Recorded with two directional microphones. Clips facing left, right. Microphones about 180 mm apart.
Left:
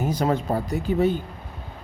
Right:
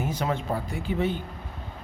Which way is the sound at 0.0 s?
40° left (ahead or behind).